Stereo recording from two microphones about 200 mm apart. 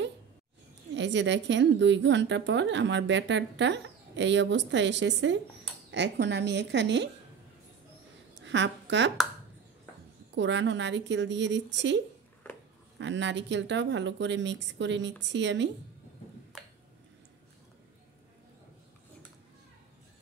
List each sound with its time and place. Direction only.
0.9 s a woman's voice: 65° right (ahead or behind)
8.4 s a woman's voice: 65° right (ahead or behind)
10.3 s a woman's voice: 65° right (ahead or behind)
13.0 s a woman's voice: 65° right (ahead or behind)